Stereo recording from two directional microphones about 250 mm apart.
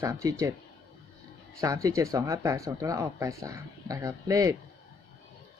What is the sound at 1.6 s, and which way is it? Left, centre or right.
Speech, centre.